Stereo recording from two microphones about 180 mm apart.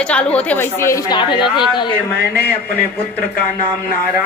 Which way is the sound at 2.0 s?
10° left (ahead or behind).